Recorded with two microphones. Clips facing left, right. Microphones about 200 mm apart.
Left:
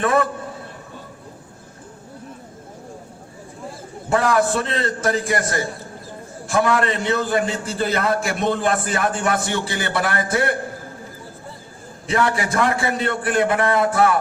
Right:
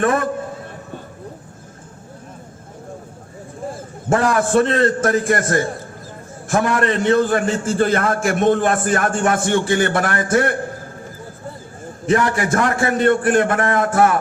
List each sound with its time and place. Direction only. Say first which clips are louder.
0.0 s a man's voice: right 1 dB; 50° right (ahead or behind)
4.4 s a man's voice: right 5 dB; 50° right (ahead or behind)
12.3 s a man's voice: right 2 dB; 50° right (ahead or behind)